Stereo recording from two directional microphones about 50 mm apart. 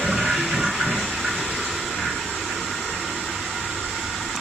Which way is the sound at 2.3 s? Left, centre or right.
Centre.